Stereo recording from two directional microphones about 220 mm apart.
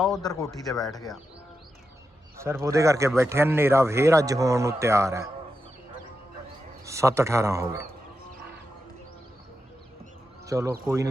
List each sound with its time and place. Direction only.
0.2 s speech: 15° left (ahead or behind)
2.4 s speech: 10° right (ahead or behind)
6.8 s speech: 15° right (ahead or behind)
10.4 s speech: 15° right (ahead or behind)